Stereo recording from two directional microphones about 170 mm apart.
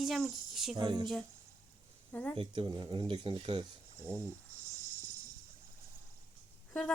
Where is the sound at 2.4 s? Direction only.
25° right (ahead or behind).